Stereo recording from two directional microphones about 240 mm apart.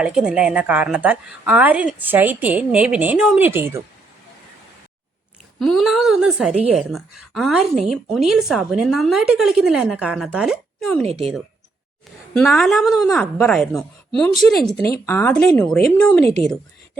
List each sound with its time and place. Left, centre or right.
0.0 s a woman's voice: centre
5.5 s a woman's voice: centre
11.0 s a woman's voice: right
12.3 s a woman's voice: centre
16.2 s a woman's voice: right